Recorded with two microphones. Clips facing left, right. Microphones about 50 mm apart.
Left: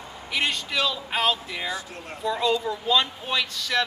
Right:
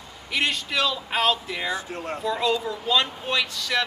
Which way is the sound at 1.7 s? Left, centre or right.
Right.